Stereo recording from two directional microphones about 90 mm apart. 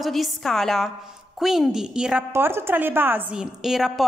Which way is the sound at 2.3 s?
25° right (ahead or behind).